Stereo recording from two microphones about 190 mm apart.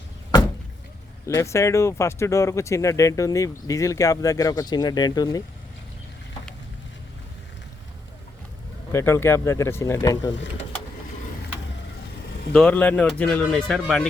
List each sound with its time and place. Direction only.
1.4 s speech: 15° left (ahead or behind)
8.9 s speech: 15° left (ahead or behind)
12.5 s speech: 5° left (ahead or behind)